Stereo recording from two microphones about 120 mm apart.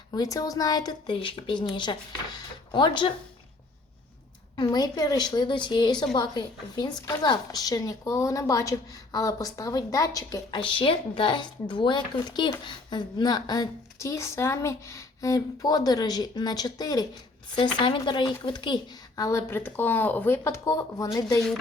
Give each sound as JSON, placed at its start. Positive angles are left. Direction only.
{"t": 0.1, "sound": "speech", "side_deg": 30}
{"t": 4.5, "sound": "speech", "side_deg": 35}